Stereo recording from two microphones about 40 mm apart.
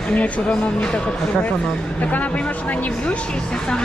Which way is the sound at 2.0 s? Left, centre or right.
Left.